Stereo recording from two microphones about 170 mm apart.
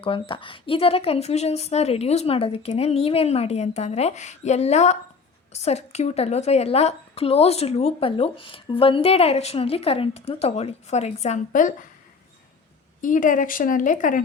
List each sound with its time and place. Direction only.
0.0 s a woman's voice: 30° left (ahead or behind); by 11.9 s 50° left (ahead or behind)
13.0 s speech: 50° left (ahead or behind)